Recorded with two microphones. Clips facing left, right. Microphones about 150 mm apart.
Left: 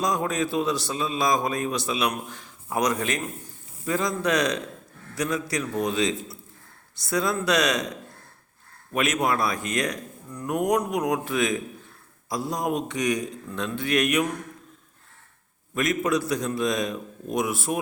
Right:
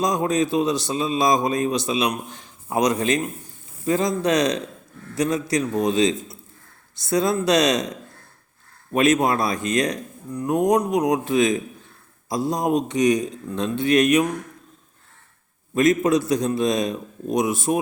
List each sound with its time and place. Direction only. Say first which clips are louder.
0.0 s a man's voice: right 4 dB; 20° right (ahead or behind)
8.9 s a man's voice: right 6 dB; 25° right (ahead or behind)
15.7 s a man's voice: right 6 dB; 25° right (ahead or behind)